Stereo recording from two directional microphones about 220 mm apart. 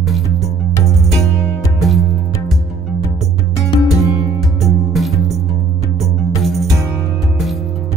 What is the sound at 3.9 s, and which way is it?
Music, centre (ahead or behind).